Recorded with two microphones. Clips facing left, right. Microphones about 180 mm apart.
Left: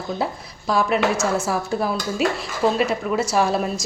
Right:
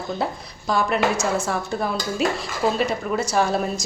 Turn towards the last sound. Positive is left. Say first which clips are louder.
# left 1 dB
turn(degrees=0)  # may be behind; listen again after turning